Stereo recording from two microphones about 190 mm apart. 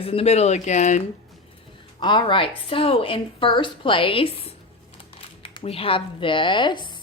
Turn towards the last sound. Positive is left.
turn(degrees=25)  # may be behind; listen again after turning